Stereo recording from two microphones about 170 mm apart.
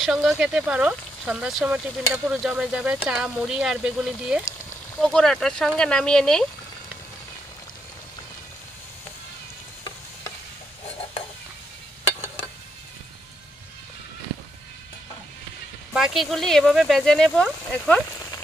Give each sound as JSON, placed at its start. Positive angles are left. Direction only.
{"t": 0.0, "sound": "speech", "side_deg": 0}
{"t": 15.9, "sound": "speech", "side_deg": -5}